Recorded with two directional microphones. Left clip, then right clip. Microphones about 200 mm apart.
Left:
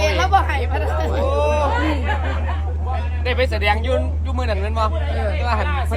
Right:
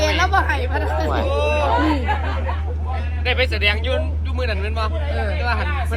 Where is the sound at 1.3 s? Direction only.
50° left (ahead or behind).